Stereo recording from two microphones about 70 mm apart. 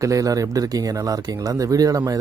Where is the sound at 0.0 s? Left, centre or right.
Right.